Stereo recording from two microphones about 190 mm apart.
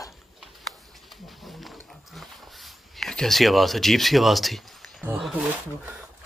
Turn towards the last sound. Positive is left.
turn(degrees=-5)  # may be behind; listen again after turning